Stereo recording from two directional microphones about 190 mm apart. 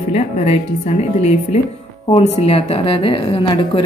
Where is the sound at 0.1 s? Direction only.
35° left (ahead or behind).